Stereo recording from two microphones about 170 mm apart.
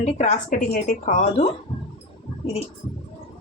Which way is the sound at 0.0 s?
45° left (ahead or behind).